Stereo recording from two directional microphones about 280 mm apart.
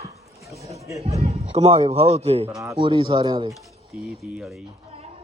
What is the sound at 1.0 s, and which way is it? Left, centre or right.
Speech, right.